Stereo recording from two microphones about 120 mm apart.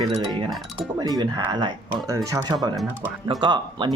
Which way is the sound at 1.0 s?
35° right (ahead or behind).